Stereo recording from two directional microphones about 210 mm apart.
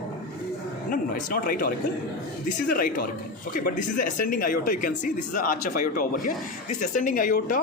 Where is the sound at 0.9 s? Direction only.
40° left (ahead or behind).